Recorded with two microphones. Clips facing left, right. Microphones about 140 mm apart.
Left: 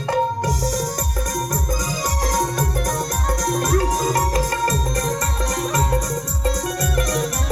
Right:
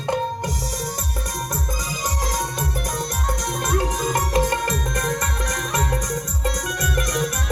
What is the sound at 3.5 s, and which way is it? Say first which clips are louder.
Music: left 4 dB; 35° left (ahead or behind).